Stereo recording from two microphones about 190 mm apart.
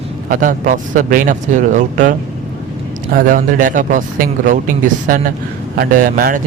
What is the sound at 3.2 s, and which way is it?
A man's voice, 45° right (ahead or behind).